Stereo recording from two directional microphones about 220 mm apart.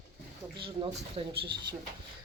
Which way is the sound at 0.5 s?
25° right (ahead or behind).